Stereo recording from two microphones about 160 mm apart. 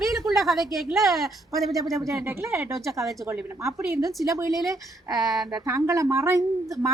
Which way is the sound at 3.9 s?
20° right (ahead or behind).